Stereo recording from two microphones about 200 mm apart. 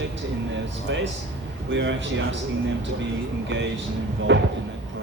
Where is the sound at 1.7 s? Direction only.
65° right (ahead or behind).